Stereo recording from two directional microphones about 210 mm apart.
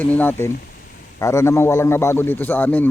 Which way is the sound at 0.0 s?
10° left (ahead or behind).